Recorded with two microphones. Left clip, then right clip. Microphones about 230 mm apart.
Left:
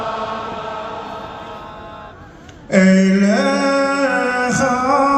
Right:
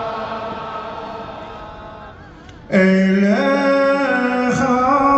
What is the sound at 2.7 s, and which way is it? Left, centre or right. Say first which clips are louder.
Music: left 1 dB; left.